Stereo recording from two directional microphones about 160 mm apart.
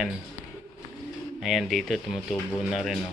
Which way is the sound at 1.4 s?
Centre (ahead or behind).